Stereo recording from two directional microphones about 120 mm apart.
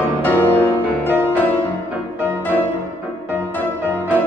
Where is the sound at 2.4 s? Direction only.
15° left (ahead or behind).